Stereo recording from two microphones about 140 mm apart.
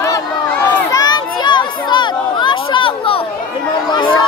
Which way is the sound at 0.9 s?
30° left (ahead or behind).